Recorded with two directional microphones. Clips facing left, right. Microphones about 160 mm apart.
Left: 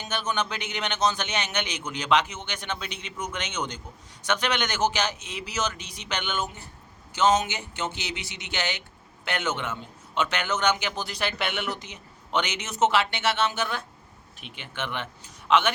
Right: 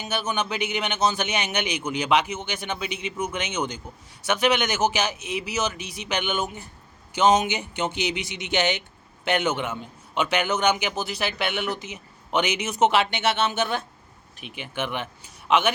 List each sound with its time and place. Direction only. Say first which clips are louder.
0.0 s a man's voice: right 2 dB; 10° right (ahead or behind)
14.4 s a man's voice: right 4 dB; 10° right (ahead or behind)